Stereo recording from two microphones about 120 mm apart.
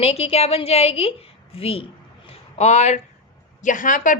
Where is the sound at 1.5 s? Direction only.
55° left (ahead or behind); by 3.0 s 70° left (ahead or behind).